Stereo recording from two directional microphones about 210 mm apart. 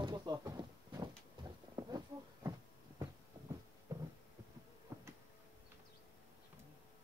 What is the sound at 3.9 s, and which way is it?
Heart sounds, 15° right (ahead or behind).